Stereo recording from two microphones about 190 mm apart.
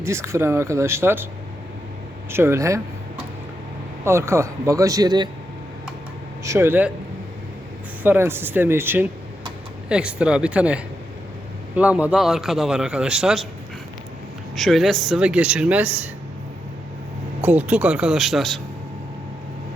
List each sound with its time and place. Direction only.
0.0 s speech: 15° right (ahead or behind)
2.3 s speech: 15° right (ahead or behind)
4.0 s speech: 15° right (ahead or behind)
6.4 s speech: 15° right (ahead or behind)
8.0 s a man's voice: 10° right (ahead or behind)
14.5 s a man's voice: centre (ahead or behind)
17.4 s a man's voice: 10° right (ahead or behind)